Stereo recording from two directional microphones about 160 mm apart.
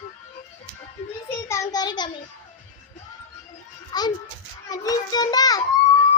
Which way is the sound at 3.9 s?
25° left (ahead or behind).